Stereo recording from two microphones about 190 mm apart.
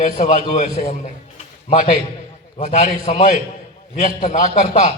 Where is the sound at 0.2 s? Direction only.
40° left (ahead or behind).